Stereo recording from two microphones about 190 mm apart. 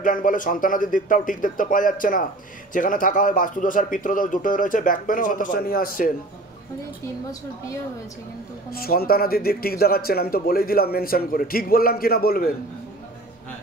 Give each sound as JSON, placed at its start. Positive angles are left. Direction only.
{"t": 0.0, "sound": "speech", "side_deg": 45}
{"t": 7.2, "sound": "a woman's voice", "side_deg": 15}
{"t": 8.6, "sound": "speech", "side_deg": 50}